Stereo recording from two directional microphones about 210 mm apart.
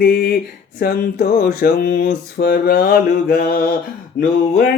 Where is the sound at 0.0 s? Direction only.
45° left (ahead or behind).